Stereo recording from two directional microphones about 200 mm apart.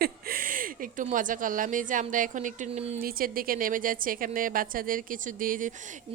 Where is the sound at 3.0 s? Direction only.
45° right (ahead or behind).